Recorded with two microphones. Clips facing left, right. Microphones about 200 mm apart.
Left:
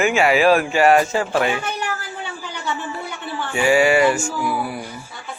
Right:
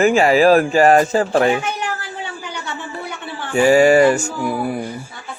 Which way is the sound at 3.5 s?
40° right (ahead or behind).